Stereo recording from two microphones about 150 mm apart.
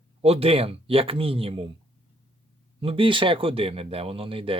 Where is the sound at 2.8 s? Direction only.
35° right (ahead or behind).